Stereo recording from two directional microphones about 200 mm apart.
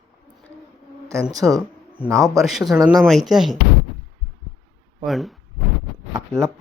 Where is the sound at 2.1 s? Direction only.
Centre (ahead or behind).